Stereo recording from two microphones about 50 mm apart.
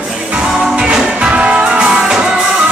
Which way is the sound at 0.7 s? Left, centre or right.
Centre.